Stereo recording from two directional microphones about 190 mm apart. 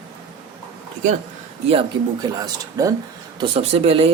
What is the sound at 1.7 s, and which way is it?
Speech, 25° right (ahead or behind).